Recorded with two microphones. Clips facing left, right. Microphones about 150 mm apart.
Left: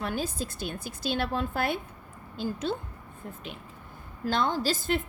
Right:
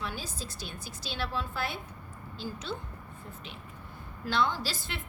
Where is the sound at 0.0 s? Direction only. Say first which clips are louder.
Left 7 dB; 55° left (ahead or behind).